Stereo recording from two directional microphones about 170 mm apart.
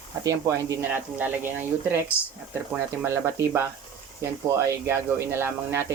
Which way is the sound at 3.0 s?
15° right (ahead or behind).